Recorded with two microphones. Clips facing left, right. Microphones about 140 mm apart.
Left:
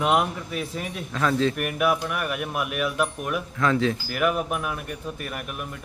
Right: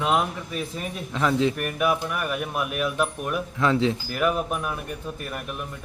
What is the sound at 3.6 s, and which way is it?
Speech, 20° right (ahead or behind).